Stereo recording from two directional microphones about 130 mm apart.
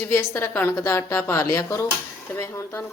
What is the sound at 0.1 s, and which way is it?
Speech, 20° left (ahead or behind).